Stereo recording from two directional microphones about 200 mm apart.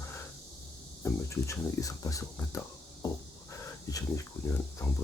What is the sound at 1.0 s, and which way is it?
Speech, 15° left (ahead or behind).